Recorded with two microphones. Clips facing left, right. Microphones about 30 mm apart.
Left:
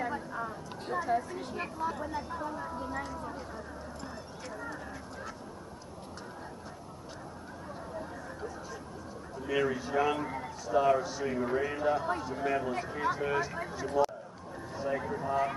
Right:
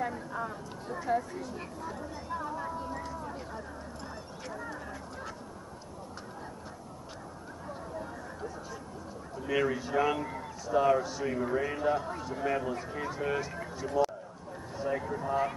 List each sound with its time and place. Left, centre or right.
0.3 s a sound: centre
1.1 s speech: centre
1.5 s speech: left
2.2 s speech: centre
3.1 s a sound: centre
4.5 s speech: centre
7.9 s chatter: centre
9.4 s speech: centre
10.1 s speech: centre